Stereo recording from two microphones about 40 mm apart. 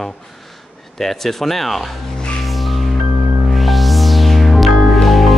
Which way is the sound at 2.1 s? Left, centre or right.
Left.